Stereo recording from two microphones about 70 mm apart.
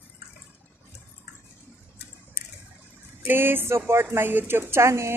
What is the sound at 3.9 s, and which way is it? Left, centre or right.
Speech, right.